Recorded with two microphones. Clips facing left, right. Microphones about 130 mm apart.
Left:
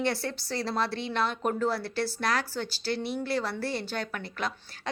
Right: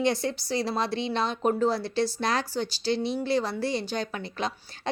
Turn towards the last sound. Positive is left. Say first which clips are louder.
# right 2 dB
turn(degrees=-20)  # may be behind; listen again after turning